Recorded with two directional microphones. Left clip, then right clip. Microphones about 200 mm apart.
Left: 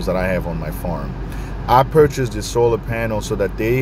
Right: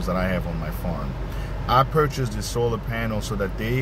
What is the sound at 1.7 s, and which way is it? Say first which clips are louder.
Speech: left 7 dB; 20° left (ahead or behind).